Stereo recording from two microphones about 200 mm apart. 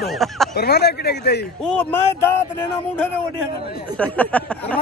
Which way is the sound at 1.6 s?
10° left (ahead or behind).